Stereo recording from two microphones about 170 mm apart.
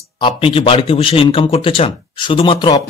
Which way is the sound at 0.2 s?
30° left (ahead or behind).